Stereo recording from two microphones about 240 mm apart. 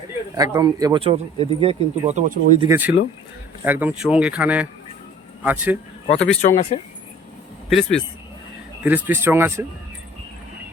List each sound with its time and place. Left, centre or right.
0.3 s speech: centre
2.6 s speech: centre
6.1 s speech: centre
6.4 s speech: left
7.7 s speech: centre